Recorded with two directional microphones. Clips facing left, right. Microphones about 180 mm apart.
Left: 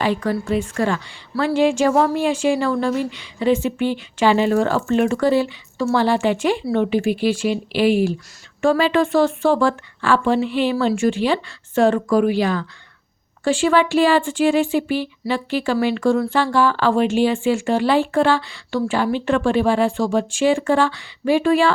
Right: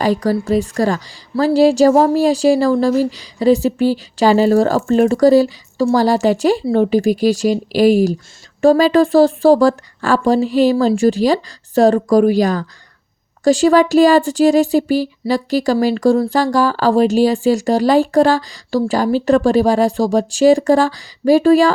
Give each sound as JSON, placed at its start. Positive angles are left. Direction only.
{"t": 0.0, "sound": "speech", "side_deg": -40}